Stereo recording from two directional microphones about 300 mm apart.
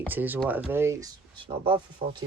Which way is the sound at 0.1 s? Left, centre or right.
Centre.